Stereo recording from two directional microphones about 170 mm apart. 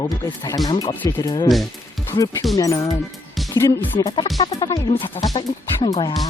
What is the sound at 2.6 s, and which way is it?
Music, 20° left (ahead or behind).